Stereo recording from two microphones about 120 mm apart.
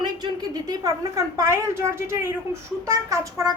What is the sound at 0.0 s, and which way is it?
A woman's voice, 35° right (ahead or behind).